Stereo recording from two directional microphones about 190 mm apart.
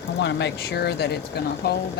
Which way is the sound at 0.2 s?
65° left (ahead or behind).